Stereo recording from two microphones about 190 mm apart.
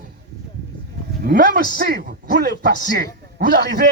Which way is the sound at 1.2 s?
50° right (ahead or behind).